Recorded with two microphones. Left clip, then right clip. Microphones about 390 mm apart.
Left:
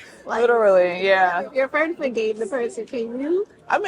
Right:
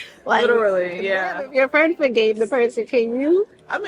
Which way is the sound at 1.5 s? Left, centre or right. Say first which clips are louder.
Right 5 dB; right.